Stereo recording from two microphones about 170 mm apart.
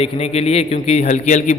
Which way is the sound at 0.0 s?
35° left (ahead or behind).